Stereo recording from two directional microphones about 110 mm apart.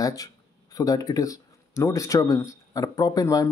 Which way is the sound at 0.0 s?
35° left (ahead or behind).